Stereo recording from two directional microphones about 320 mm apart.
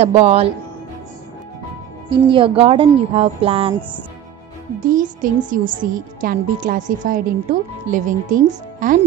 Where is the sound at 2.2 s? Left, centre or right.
Centre.